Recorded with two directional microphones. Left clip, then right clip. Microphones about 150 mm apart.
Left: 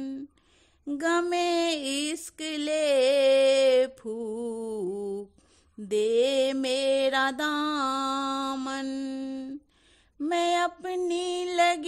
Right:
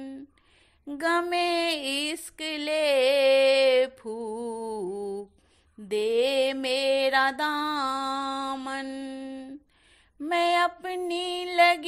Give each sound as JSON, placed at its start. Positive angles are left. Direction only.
{"t": 0.8, "sound": "a sound", "side_deg": 35}
{"t": 4.9, "sound": "lullaby", "side_deg": 40}
{"t": 5.9, "sound": "music", "side_deg": 35}
{"t": 8.8, "sound": "mantra", "side_deg": 50}
{"t": 10.1, "sound": "a sound", "side_deg": 35}
{"t": 11.0, "sound": "music", "side_deg": 35}